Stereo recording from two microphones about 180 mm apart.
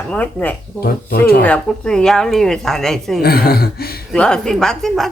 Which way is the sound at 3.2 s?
60° left (ahead or behind).